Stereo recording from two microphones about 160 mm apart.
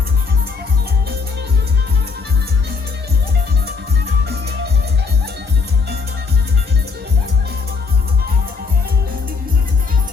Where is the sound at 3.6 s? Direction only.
90° right.